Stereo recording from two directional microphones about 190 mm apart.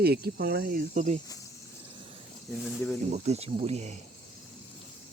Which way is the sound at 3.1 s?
35° right (ahead or behind).